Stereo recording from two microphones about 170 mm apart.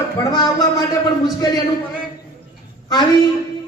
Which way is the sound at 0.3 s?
25° left (ahead or behind).